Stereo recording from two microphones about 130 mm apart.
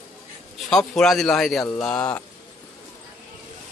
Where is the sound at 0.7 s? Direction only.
5° left (ahead or behind).